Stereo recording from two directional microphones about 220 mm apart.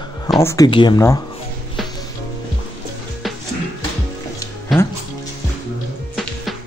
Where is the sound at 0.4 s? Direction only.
10° left (ahead or behind).